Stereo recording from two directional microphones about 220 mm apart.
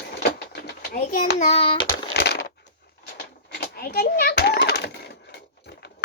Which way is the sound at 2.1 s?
50° left (ahead or behind).